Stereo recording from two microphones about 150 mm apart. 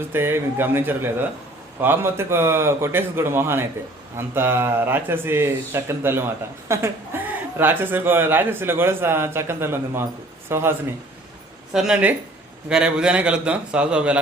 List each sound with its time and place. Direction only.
0.1 s speech: 15° right (ahead or behind)
11.7 s speech: 5° right (ahead or behind)